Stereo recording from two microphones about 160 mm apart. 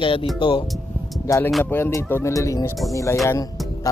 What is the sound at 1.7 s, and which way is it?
Speech, 15° left (ahead or behind).